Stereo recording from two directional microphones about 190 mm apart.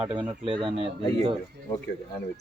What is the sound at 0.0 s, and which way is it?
Speech, 10° right (ahead or behind).